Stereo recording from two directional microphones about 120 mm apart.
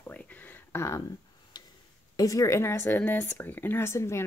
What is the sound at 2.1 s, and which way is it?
Speech, 30° left (ahead or behind).